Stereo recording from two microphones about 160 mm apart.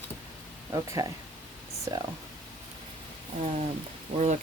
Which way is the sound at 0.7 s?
20° right (ahead or behind).